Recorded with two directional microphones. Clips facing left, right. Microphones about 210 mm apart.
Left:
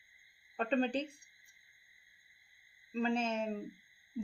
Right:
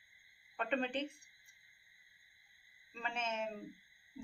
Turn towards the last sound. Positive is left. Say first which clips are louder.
# left 8 dB
turn(degrees=35)  # may be behind; listen again after turning